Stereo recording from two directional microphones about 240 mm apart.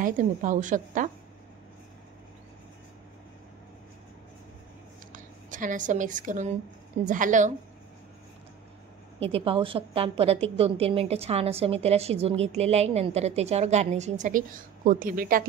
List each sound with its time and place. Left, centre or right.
0.0 s a woman's voice: right
5.1 s a woman's voice: right
9.2 s a woman's voice: right